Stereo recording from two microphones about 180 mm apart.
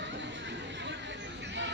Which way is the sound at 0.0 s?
80° right.